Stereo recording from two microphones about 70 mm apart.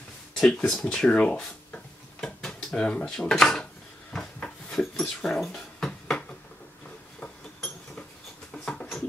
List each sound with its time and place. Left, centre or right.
0.4 s speech: centre
4.1 s dog: centre
7.2 s a sound: centre